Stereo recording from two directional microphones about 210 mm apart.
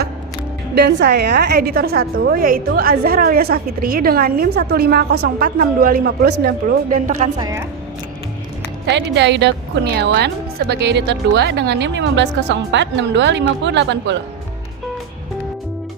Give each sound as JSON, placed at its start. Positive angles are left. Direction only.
{"t": 0.8, "sound": "a woman's voice", "side_deg": -55}
{"t": 7.3, "sound": "a woman's voice", "side_deg": -15}
{"t": 8.9, "sound": "speech", "side_deg": -55}